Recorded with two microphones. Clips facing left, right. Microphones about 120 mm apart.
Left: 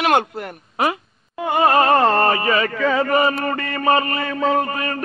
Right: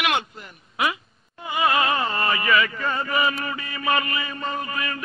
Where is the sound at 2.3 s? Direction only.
40° left (ahead or behind).